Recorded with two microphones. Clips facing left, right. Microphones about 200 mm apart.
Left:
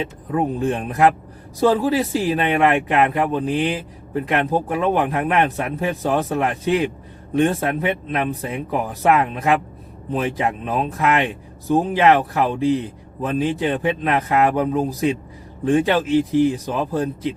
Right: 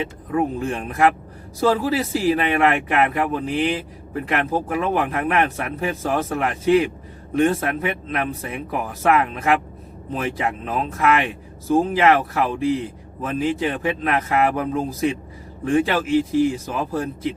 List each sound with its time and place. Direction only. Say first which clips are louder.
0.3 s a man's voice: left 2 dB; 20° left (ahead or behind)
16.6 s a man's voice: left 3 dB; 15° left (ahead or behind)